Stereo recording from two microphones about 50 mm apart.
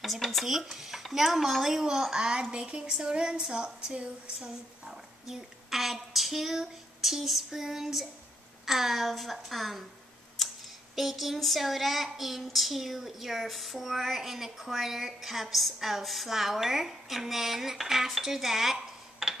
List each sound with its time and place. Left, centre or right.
0.0 s child singing: centre
2.5 s a woman's voice: right
5.2 s speech: centre
8.6 s child singing: centre
10.4 s a sound: centre
11.0 s child singing: centre